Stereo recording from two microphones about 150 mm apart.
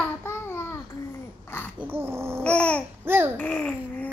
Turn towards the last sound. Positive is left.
turn(degrees=5)  # may be behind; listen again after turning